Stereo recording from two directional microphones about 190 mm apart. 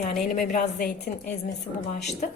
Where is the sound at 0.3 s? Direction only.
50° left (ahead or behind).